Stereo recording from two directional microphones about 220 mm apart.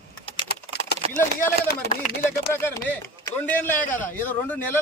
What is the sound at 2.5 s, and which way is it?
A man's voice, 10° left (ahead or behind).